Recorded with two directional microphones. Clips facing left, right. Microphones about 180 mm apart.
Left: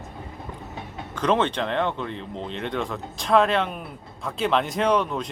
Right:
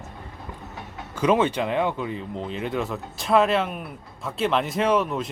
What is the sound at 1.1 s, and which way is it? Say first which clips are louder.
Speech: right 2 dB; 10° right (ahead or behind).